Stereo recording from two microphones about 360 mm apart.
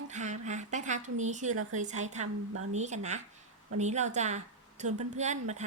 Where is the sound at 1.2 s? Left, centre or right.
Centre.